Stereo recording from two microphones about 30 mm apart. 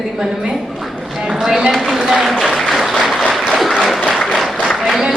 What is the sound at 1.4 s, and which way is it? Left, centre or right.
Speech, centre.